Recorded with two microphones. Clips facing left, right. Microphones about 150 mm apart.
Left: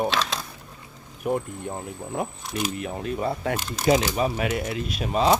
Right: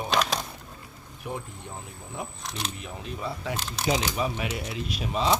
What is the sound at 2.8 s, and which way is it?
Speech, 60° left (ahead or behind).